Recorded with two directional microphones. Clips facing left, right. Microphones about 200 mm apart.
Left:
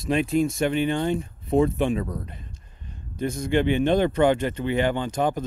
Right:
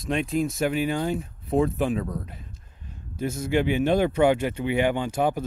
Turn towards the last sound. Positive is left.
turn(degrees=-10)  # may be behind; listen again after turning